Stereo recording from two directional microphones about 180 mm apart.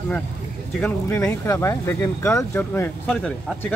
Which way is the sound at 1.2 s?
20° left (ahead or behind).